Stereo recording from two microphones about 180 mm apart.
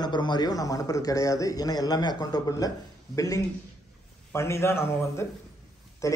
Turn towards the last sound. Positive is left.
turn(degrees=20)  # may be behind; listen again after turning